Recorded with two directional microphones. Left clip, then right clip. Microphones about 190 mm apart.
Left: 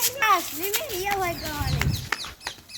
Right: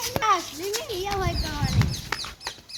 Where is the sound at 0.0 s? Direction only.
25° left (ahead or behind).